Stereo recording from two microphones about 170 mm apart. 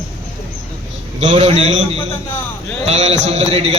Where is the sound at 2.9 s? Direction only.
40° right (ahead or behind).